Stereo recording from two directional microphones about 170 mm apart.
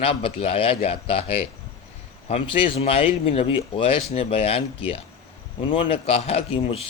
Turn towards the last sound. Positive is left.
turn(degrees=35)  # may be behind; listen again after turning